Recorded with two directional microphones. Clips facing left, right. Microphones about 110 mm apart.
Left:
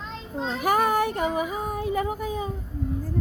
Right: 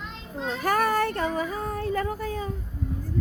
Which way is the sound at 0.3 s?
20° left (ahead or behind).